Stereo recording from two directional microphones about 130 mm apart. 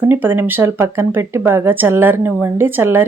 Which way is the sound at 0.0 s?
15° right (ahead or behind).